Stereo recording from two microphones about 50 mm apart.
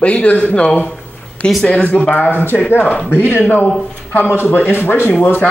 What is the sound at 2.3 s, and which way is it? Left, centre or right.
A man's voice, left.